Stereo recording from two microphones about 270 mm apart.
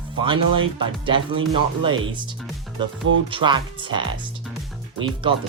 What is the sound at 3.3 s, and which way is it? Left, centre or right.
Speech, centre.